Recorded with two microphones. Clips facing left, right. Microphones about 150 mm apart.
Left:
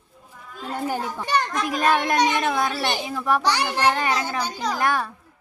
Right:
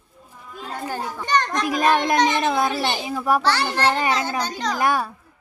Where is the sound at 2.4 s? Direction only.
15° right (ahead or behind).